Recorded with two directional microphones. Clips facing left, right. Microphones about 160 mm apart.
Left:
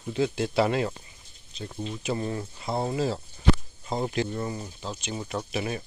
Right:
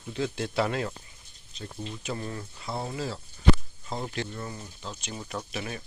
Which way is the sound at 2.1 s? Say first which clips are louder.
Left 6 dB; 20° left (ahead or behind).